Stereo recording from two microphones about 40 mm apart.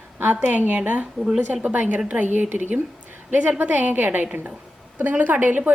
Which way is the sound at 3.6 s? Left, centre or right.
Right.